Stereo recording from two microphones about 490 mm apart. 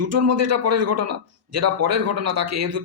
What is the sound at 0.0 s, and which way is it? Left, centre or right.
A man's voice, right.